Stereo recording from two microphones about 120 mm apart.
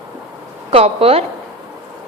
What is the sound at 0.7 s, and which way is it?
Speech, 55° right (ahead or behind).